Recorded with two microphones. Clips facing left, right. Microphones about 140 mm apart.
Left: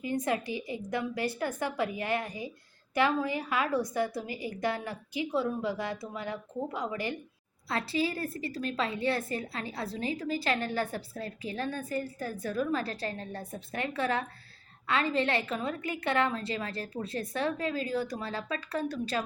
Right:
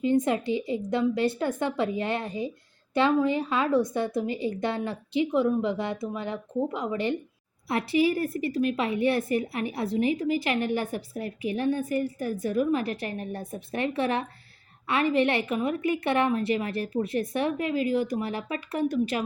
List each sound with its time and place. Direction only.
0.0 s a woman's voice: 25° right (ahead or behind)